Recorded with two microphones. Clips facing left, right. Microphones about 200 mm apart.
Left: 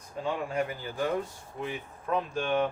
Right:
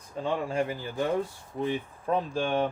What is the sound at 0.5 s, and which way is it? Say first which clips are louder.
Speech: right 2 dB; 25° right (ahead or behind).